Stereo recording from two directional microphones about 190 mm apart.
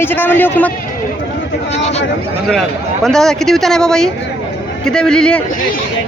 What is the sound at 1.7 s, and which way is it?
Speech, 35° left (ahead or behind).